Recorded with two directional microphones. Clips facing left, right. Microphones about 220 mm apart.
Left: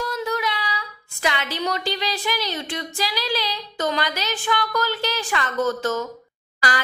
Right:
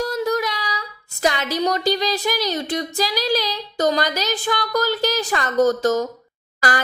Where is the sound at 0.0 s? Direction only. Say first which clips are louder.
Right 4 dB; 40° right (ahead or behind).